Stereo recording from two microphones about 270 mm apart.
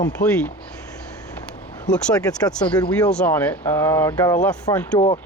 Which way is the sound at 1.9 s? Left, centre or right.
Centre.